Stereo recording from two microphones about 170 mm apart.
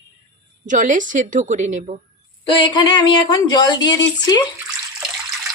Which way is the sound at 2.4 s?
30° left (ahead or behind).